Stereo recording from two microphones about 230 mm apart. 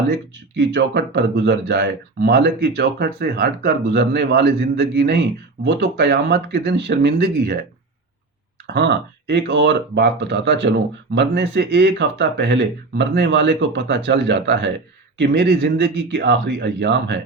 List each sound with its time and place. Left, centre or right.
0.1 s speech: right
8.6 s speech: right